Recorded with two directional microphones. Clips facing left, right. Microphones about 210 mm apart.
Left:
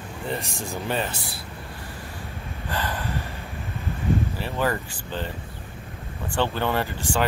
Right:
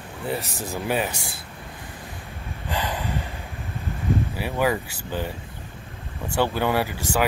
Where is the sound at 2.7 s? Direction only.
15° right (ahead or behind).